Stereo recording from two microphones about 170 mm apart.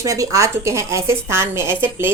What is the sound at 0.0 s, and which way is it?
A woman's voice, 20° right (ahead or behind).